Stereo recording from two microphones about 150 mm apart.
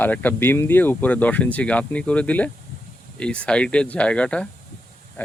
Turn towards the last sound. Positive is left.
turn(degrees=10)  # may be behind; listen again after turning